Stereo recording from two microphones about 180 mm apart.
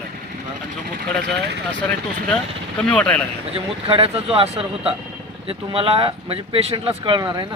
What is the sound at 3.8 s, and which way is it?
Speech, 35° right (ahead or behind).